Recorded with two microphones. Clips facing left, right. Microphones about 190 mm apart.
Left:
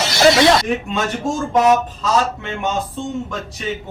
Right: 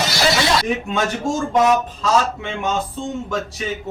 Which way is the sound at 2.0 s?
Centre (ahead or behind).